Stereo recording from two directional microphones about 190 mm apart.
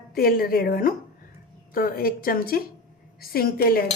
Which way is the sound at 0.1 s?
50° left (ahead or behind).